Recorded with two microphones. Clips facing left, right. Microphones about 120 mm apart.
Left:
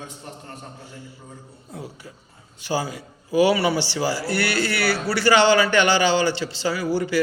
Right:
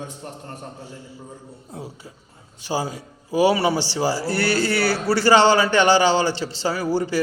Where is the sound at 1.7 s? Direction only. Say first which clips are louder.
Even; 35° right (ahead or behind).